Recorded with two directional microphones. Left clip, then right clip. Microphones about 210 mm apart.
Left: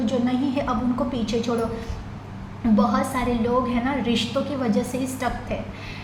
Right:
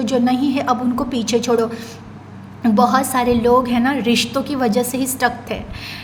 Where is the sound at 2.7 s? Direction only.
45° right (ahead or behind).